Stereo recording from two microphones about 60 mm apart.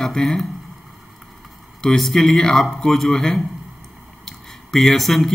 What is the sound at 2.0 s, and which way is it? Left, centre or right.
Speech, centre.